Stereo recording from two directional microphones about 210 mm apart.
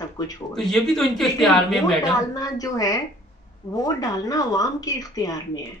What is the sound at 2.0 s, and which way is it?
Speech, 15° left (ahead or behind).